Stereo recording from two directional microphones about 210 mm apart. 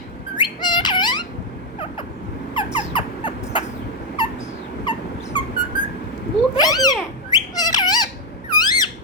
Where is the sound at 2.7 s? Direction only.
25° left (ahead or behind).